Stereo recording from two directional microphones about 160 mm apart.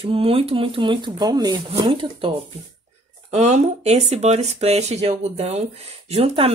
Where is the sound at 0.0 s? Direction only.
35° right (ahead or behind).